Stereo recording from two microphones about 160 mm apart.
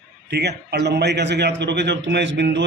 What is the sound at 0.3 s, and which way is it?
A man's voice, 90° right.